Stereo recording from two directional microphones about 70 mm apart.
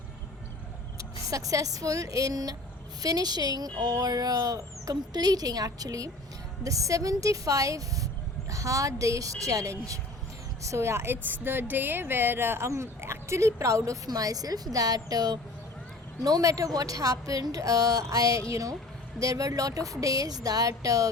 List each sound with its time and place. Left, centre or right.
0.9 s a woman's voice: right